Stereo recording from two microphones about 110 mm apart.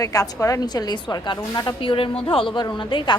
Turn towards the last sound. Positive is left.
turn(degrees=45)  # may be behind; listen again after turning